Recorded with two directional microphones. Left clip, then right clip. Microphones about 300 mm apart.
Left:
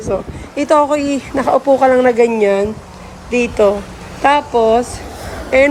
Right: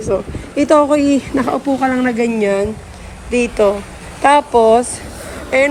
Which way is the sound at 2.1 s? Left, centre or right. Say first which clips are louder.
Left 4 dB; centre.